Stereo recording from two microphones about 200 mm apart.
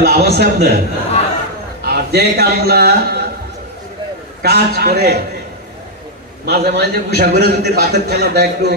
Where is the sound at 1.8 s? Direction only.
55° right (ahead or behind).